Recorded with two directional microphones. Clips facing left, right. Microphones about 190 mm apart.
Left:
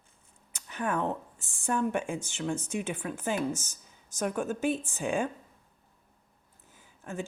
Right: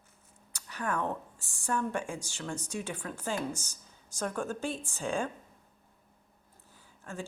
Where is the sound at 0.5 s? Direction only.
20° left (ahead or behind).